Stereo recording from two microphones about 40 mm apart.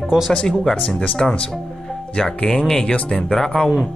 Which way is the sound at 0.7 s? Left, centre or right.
Left.